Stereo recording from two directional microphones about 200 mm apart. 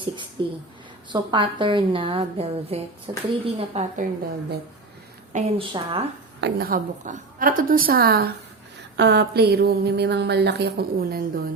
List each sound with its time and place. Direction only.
0.4 s a woman's voice: 25° right (ahead or behind)
3.9 s a woman's voice: 45° right (ahead or behind); by 6.1 s 25° right (ahead or behind)
6.4 s a woman's voice: 50° right (ahead or behind)